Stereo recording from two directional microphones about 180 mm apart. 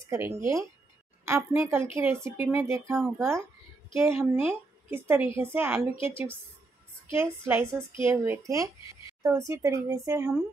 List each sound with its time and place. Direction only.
0.0 s a woman's voice: 15° right (ahead or behind)
5.9 s a woman's voice: 30° left (ahead or behind)
7.2 s a woman's voice: 15° right (ahead or behind)